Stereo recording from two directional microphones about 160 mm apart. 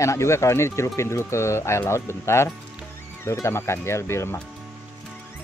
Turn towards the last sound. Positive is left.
turn(degrees=15)  # may be behind; listen again after turning